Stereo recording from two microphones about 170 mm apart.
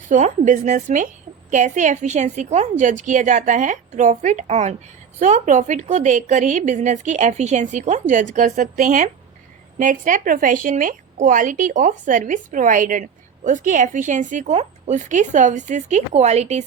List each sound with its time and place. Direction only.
0.1 s a woman's voice: 45° right (ahead or behind)